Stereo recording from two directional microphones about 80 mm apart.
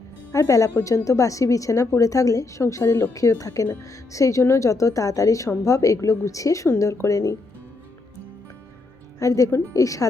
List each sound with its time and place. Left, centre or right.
0.3 s a woman's voice: left
9.1 s a woman's voice: left